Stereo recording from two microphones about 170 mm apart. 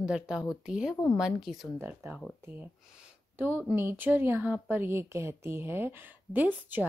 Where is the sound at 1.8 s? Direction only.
10° right (ahead or behind).